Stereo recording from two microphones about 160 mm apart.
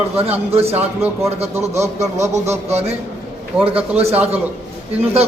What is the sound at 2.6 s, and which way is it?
A man's voice, 40° right (ahead or behind).